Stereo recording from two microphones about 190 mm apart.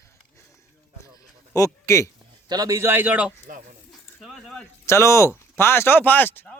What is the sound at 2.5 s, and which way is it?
Speech, 20° right (ahead or behind).